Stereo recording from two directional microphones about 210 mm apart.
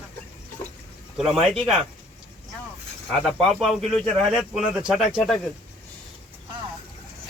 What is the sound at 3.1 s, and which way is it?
Speech, centre (ahead or behind).